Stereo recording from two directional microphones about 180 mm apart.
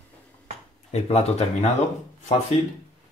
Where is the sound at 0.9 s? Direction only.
35° left (ahead or behind).